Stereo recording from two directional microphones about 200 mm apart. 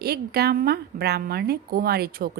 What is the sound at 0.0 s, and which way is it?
Speech, 50° right (ahead or behind).